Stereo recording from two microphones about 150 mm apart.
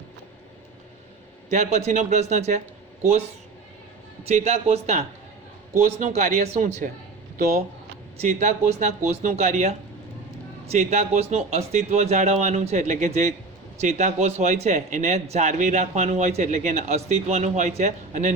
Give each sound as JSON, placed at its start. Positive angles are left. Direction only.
{"t": 1.5, "sound": "a man's voice", "side_deg": -50}
{"t": 8.2, "sound": "a man's voice", "side_deg": -50}